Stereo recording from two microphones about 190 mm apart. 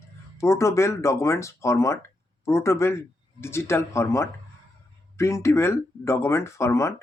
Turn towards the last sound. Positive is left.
turn(degrees=15)  # may be behind; listen again after turning